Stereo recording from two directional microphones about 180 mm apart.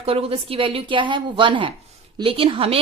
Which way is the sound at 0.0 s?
35° right (ahead or behind).